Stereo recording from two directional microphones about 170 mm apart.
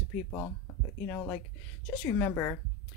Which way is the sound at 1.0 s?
10° left (ahead or behind).